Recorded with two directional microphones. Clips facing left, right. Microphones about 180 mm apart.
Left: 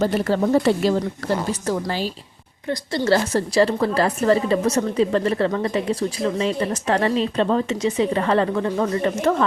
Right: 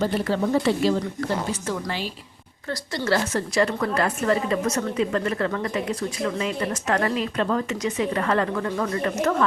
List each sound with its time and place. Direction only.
0.0 s a woman's voice: 45° left (ahead or behind)
2.6 s a woman's voice: 25° left (ahead or behind)